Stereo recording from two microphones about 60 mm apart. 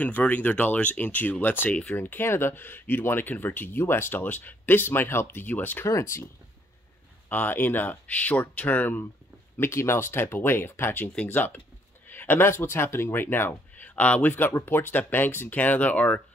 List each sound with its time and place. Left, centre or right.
0.0 s speech: left
5.9 s speech: left
7.2 s speech: left
9.6 s speech: left